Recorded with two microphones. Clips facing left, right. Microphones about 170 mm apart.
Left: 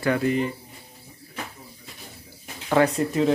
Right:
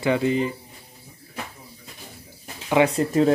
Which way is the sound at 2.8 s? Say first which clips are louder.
Right 1 dB; 15° right (ahead or behind).